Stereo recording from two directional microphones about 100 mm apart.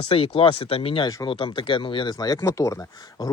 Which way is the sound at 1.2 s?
55° left (ahead or behind).